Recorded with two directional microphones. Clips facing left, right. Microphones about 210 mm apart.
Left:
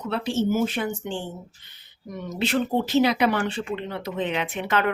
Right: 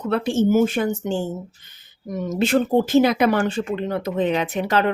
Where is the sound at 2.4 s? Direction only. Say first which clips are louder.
Right 5 dB; 45° right (ahead or behind).